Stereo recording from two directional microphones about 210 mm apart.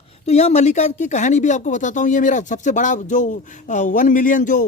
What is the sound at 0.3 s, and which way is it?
A man's voice, 30° left (ahead or behind).